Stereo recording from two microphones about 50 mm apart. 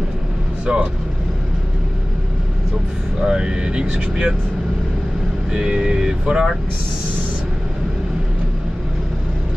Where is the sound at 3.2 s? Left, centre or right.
Centre.